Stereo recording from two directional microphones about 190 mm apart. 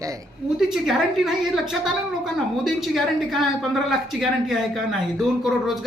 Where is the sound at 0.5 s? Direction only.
Centre (ahead or behind).